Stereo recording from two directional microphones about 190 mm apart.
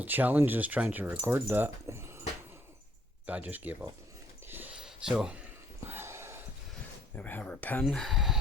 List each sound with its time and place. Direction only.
0.0 s speech: 10° right (ahead or behind)
3.2 s speech: 10° right (ahead or behind)
4.4 s a sound: 10° right (ahead or behind)
7.2 s speech: 10° left (ahead or behind)